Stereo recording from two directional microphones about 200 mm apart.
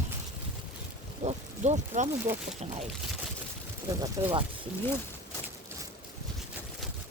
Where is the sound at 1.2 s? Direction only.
35° right (ahead or behind).